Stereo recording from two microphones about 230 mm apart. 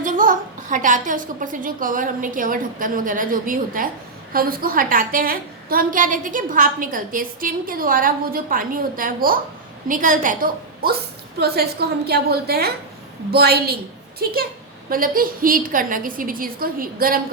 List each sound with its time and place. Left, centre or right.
0.0 s a woman's voice: right
14.8 s a woman's voice: right